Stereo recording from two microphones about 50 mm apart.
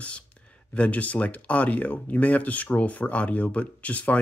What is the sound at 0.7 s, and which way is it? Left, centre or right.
Speech, left.